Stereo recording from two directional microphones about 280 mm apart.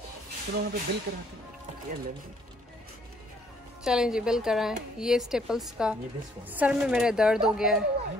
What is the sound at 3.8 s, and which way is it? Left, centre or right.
A woman's voice, centre.